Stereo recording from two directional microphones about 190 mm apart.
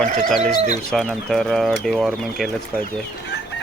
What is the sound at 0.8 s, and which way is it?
Speech, centre (ahead or behind).